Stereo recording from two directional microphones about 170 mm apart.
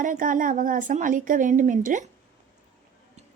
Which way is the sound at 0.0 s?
50° right (ahead or behind).